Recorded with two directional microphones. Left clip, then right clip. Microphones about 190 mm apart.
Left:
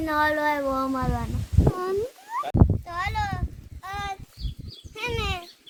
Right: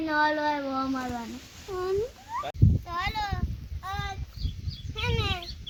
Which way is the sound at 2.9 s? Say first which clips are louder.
Left 2 dB; 20° left (ahead or behind).